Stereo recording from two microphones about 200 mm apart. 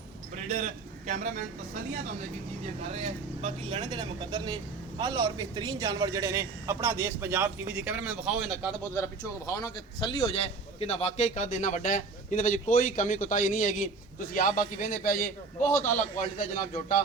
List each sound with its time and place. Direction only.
0.4 s a man's voice: 35° right (ahead or behind)
2.9 s speech: 30° right (ahead or behind); by 8.7 s 5° right (ahead or behind)
9.5 s a man's voice: 20° left (ahead or behind); by 17.0 s 40° left (ahead or behind)